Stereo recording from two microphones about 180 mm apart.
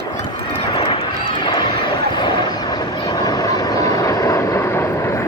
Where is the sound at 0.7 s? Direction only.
25° left (ahead or behind).